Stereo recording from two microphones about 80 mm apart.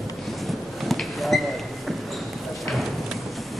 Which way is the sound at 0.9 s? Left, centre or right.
Centre.